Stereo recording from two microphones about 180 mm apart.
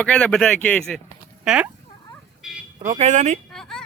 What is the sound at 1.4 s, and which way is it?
Speech, 5° right (ahead or behind).